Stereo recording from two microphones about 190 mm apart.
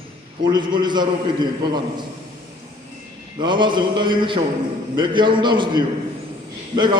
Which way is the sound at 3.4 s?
25° right (ahead or behind).